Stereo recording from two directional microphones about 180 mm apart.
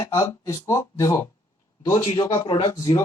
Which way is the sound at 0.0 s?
15° left (ahead or behind).